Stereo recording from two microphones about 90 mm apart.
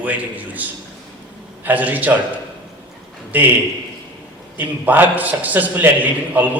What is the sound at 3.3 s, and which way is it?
Speech, 20° right (ahead or behind).